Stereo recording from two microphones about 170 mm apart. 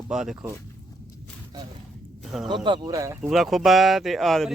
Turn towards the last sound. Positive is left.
turn(degrees=0)  # may be behind; listen again after turning